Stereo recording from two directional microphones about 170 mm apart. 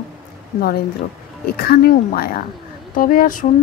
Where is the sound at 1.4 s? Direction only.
65° left (ahead or behind).